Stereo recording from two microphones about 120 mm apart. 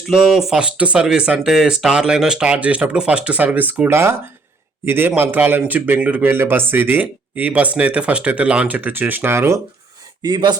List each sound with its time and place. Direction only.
0.1 s a man's voice: centre (ahead or behind); by 9.6 s 20° right (ahead or behind)
10.2 s speech: 35° right (ahead or behind)